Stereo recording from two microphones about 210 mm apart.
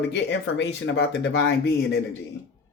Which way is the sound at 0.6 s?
55° left (ahead or behind).